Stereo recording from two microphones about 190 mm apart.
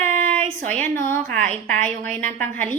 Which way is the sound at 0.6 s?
40° right (ahead or behind).